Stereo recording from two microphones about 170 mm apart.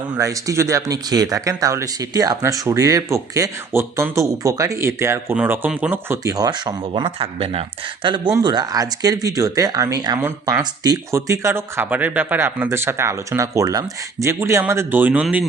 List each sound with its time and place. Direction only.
0.2 s speech: 20° right (ahead or behind)